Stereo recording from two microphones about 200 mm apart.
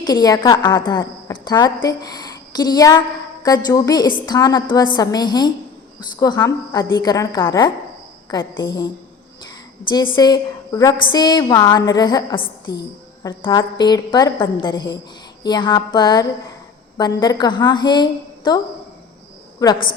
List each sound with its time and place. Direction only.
0.0 s a woman's voice: 20° left (ahead or behind)
10.2 s a woman's voice: 20° left (ahead or behind)
19.6 s a woman's voice: 20° left (ahead or behind)